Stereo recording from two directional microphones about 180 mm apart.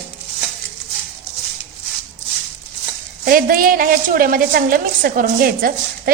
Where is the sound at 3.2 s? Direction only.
55° right (ahead or behind).